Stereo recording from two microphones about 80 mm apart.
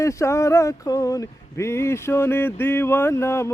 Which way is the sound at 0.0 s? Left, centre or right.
Left.